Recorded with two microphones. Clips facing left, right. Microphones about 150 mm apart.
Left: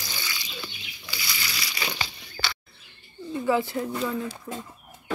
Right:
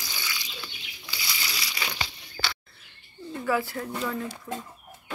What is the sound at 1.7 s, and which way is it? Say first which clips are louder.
Crumpling: left 4 dB; 10° left (ahead or behind).